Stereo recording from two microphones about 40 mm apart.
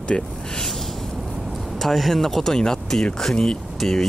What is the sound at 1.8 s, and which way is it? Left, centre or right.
Speech, centre.